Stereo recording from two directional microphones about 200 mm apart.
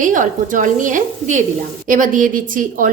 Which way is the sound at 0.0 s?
40° right (ahead or behind).